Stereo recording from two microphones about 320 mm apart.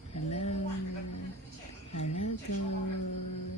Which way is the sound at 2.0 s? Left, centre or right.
Left.